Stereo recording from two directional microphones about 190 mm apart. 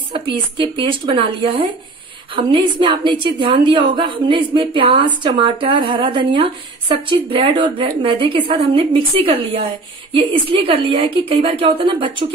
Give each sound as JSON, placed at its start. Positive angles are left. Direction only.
{"t": 0.3, "sound": "a woman's voice", "side_deg": -25}